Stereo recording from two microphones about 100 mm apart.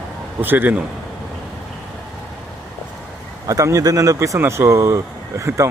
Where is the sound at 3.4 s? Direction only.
35° right (ahead or behind).